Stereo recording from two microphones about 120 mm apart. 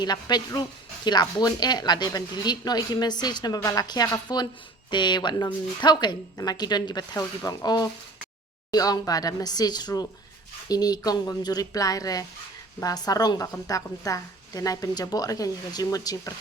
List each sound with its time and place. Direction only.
0.0 s speech: 35° left (ahead or behind)